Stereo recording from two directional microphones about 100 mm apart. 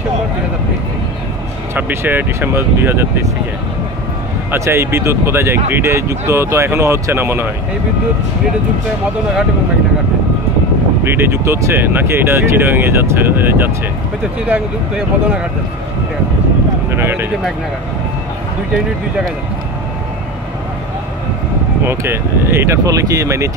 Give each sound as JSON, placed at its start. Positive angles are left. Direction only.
{"t": 1.8, "sound": "speech", "side_deg": -20}
{"t": 4.5, "sound": "speech", "side_deg": -25}
{"t": 11.1, "sound": "speech", "side_deg": -25}
{"t": 16.9, "sound": "speech", "side_deg": -25}
{"t": 21.8, "sound": "speech", "side_deg": -25}